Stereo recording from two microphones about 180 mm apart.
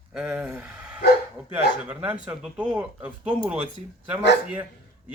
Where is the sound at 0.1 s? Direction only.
5° right (ahead or behind).